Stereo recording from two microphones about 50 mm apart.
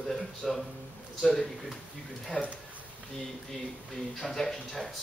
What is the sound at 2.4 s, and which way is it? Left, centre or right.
Speech, left.